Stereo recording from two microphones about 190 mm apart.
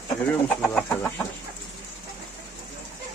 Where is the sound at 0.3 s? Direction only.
5° left (ahead or behind).